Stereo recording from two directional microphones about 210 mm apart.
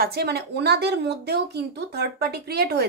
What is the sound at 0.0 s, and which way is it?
A woman's voice, 50° right (ahead or behind).